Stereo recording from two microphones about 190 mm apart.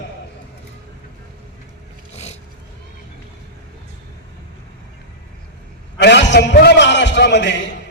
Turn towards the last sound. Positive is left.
turn(degrees=65)  # may be behind; listen again after turning